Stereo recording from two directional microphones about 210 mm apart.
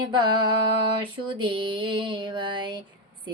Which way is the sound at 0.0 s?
20° right (ahead or behind).